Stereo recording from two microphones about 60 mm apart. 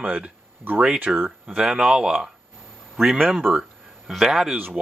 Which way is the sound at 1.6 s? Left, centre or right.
Centre.